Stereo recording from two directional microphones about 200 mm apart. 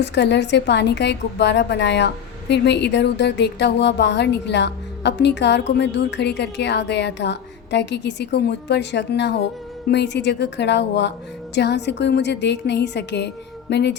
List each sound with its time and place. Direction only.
0.0 s a woman's voice: 60° left (ahead or behind)